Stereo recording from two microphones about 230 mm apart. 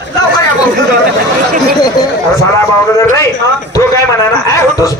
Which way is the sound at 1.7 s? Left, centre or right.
Centre.